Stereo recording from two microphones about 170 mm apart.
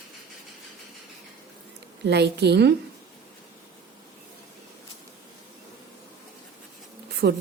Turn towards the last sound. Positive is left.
turn(degrees=-75)  # may be behind; listen again after turning